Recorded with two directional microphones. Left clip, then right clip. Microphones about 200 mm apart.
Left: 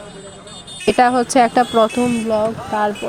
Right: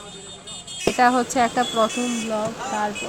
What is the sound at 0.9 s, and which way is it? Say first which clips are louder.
Speech: left 5 dB; 30° left (ahead or behind).